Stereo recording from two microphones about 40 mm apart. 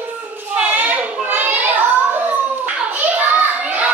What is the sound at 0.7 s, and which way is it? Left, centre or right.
Children playing, right.